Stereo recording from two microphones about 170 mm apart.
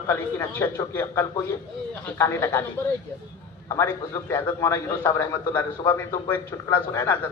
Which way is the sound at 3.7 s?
15° left (ahead or behind).